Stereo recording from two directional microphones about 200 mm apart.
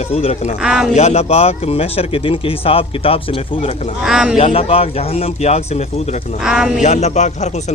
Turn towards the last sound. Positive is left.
turn(degrees=35)  # may be behind; listen again after turning